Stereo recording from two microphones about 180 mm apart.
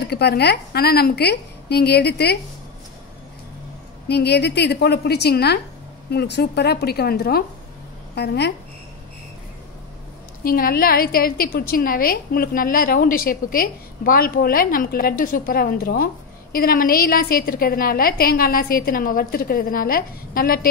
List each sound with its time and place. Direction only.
0.1 s a woman's voice: 65° left (ahead or behind)
4.1 s a woman's voice: 70° left (ahead or behind)
10.4 s a woman's voice: 55° left (ahead or behind)